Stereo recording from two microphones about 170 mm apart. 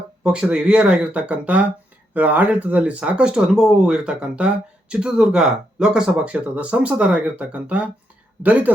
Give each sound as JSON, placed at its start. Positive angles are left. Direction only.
{"t": 0.2, "sound": "speech", "side_deg": -5}